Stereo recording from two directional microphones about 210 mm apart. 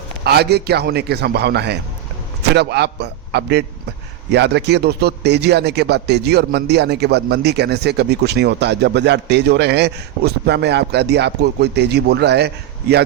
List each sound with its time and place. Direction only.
0.3 s a man's voice: 50° right (ahead or behind)